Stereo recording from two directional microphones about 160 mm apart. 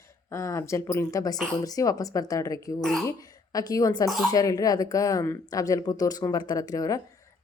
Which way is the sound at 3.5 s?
20° left (ahead or behind).